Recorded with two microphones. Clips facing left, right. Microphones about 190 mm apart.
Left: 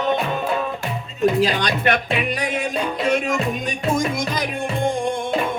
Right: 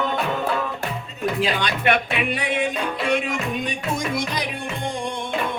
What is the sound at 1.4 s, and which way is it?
Music, 40° left (ahead or behind).